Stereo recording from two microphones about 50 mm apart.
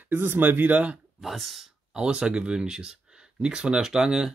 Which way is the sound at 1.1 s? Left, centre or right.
Centre.